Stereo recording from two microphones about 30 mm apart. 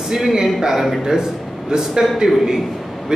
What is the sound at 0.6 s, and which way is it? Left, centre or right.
A man's voice, centre.